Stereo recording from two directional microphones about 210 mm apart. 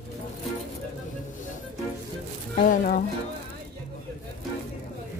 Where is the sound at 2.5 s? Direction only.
40° left (ahead or behind).